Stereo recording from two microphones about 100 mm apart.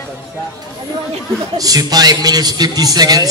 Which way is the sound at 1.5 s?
40° right (ahead or behind).